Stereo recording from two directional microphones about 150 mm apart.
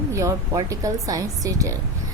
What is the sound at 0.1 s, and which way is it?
A woman's voice, 20° right (ahead or behind).